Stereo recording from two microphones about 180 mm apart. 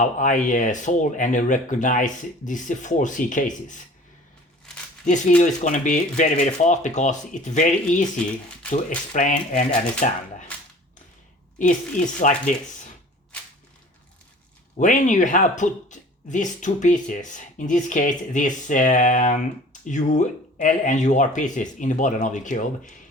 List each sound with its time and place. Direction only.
0.0 s speech: 45° left (ahead or behind)
5.0 s speech: 45° left (ahead or behind)
9.1 s speech: 45° left (ahead or behind)
11.6 s speech: 45° left (ahead or behind)
14.8 s speech: 45° left (ahead or behind)